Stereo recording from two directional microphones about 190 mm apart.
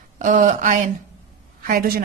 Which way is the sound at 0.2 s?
40° right (ahead or behind).